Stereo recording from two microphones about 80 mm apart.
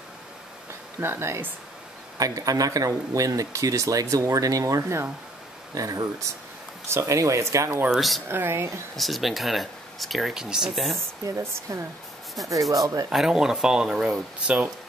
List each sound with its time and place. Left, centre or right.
1.0 s speech: right
2.1 s speech: right
5.8 s speech: right
7.9 s speech: centre
8.3 s speech: right
8.9 s speech: centre
11.2 s speech: right
13.1 s speech: centre